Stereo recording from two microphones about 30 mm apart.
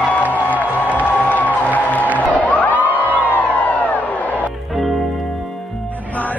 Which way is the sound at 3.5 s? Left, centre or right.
Left.